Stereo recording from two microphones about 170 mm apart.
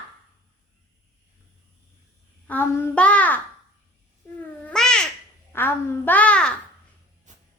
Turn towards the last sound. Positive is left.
turn(degrees=5)  # may be behind; listen again after turning